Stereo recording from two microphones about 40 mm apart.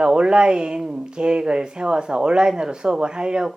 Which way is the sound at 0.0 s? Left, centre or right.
Right.